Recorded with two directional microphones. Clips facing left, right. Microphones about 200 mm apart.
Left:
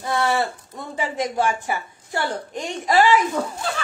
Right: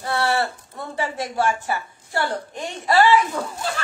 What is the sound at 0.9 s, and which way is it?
A woman's voice, 15° left (ahead or behind).